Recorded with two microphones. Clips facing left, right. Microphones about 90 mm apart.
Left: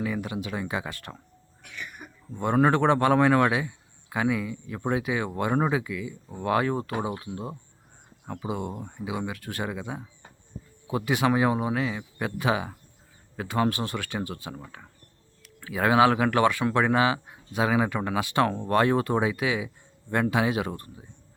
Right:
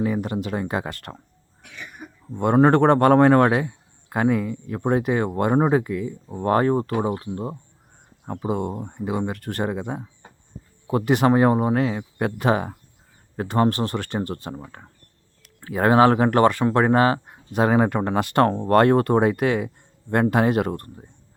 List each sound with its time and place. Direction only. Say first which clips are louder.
0.0 s a man's voice: right 6 dB; 45° right (ahead or behind)
2.4 s a man's voice: right 6 dB; 50° right (ahead or behind)
8.3 s a man's voice: right 6 dB; 40° right (ahead or behind)
8.7 s speech: right 6 dB; 25° right (ahead or behind)
9.0 s a man's voice: right 6 dB; 45° right (ahead or behind)
14.8 s speech: right 2 dB; 55° right (ahead or behind)
15.6 s a man's voice: right 4 dB; 45° right (ahead or behind)